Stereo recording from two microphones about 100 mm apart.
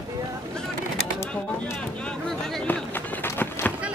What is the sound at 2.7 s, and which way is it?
Run, 20° left (ahead or behind).